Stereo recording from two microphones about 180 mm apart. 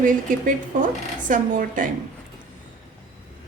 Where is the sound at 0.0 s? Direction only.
45° right (ahead or behind).